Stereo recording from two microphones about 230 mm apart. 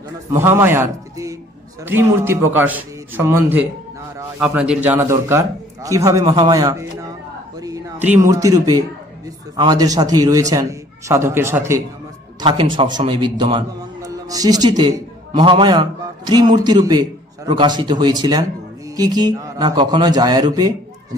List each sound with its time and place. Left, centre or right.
0.3 s a man's voice: centre
12.4 s a man's voice: right